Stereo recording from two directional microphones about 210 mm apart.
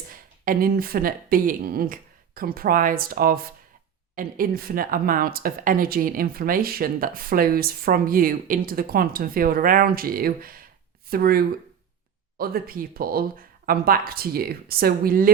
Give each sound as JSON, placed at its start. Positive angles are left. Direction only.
{"t": 0.1, "sound": "a woman's voice", "side_deg": -45}